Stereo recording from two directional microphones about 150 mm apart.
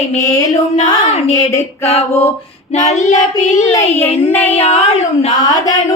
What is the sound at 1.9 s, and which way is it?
Speech, 45° left (ahead or behind).